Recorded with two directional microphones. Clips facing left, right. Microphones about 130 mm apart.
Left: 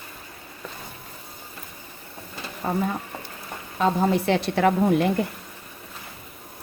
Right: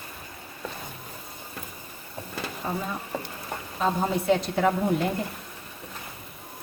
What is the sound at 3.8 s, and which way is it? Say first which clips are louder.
A woman's voice: left 4 dB; 75° left (ahead or behind).